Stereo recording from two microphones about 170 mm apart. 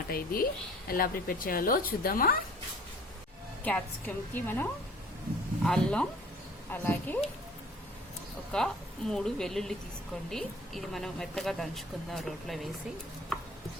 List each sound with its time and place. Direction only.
0.1 s speech: 60° left (ahead or behind)
3.6 s a woman's voice: 10° left (ahead or behind)
8.5 s speech: 5° left (ahead or behind)